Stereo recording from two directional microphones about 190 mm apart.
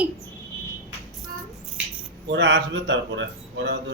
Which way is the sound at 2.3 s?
65° right (ahead or behind).